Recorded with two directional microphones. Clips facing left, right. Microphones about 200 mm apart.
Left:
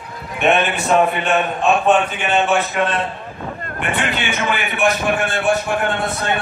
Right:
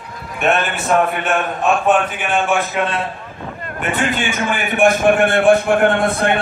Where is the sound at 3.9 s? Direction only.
40° right (ahead or behind).